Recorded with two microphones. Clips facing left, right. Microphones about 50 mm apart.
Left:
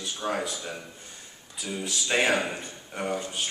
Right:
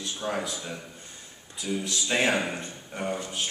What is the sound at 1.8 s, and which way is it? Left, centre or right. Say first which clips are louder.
Speech: left 2 dB; centre.